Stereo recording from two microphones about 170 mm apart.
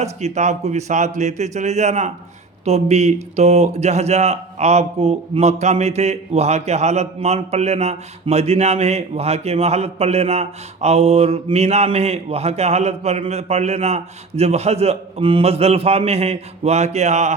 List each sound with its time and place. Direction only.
0.0 s speech: 40° right (ahead or behind)